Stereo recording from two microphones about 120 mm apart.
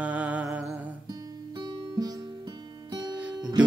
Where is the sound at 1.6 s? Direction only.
30° right (ahead or behind).